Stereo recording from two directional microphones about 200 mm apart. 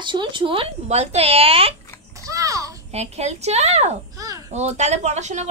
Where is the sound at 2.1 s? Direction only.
15° right (ahead or behind).